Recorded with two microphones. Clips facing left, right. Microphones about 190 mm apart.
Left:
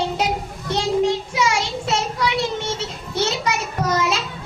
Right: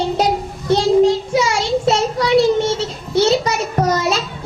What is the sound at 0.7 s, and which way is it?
Child singing, 35° right (ahead or behind).